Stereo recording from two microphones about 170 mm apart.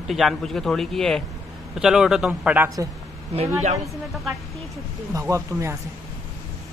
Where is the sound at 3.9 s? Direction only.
Centre (ahead or behind).